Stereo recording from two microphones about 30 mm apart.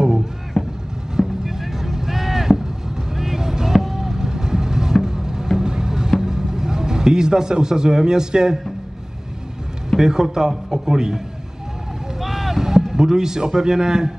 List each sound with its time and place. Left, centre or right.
0.6 s vehicle: centre
1.1 s vehicle: centre
3.2 s music: centre
3.9 s vehicle: centre
5.0 s music: right
6.2 s speech: centre
9.9 s a man's voice: centre
12.2 s a sound: centre